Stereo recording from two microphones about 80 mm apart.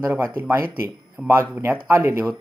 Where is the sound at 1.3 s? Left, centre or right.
Right.